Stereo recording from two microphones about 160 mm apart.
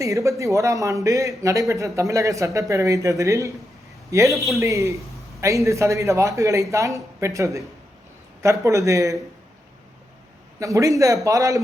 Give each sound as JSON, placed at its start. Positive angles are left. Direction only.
{"t": 0.0, "sound": "a man's voice", "side_deg": -20}
{"t": 10.6, "sound": "a man's voice", "side_deg": -20}